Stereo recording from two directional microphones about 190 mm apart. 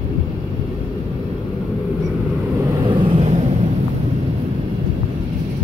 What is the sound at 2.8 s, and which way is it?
Vehicle, 30° right (ahead or behind).